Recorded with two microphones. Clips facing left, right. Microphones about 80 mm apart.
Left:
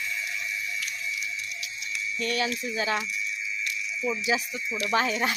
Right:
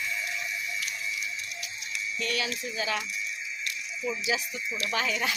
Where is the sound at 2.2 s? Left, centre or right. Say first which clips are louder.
Left 4 dB; left.